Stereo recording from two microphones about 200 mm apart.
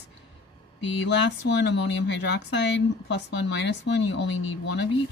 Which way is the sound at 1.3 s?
60° left (ahead or behind).